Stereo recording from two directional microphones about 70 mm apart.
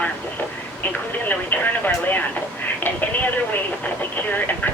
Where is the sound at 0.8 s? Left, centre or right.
Left.